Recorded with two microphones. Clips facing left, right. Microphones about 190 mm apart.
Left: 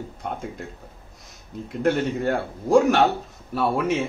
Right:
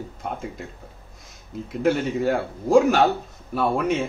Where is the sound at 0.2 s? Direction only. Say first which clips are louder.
Even; centre (ahead or behind).